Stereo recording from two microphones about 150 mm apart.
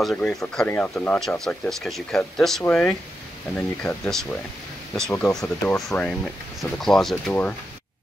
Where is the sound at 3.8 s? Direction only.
15° left (ahead or behind).